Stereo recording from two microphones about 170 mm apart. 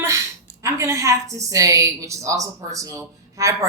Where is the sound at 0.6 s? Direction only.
20° right (ahead or behind).